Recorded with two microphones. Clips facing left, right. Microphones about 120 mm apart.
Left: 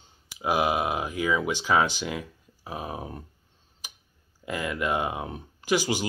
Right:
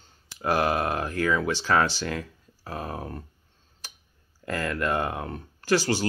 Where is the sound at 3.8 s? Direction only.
15° left (ahead or behind).